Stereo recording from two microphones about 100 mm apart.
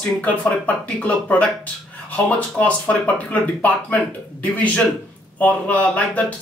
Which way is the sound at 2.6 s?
15° left (ahead or behind).